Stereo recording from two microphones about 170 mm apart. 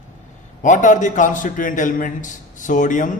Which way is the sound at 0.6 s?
45° left (ahead or behind).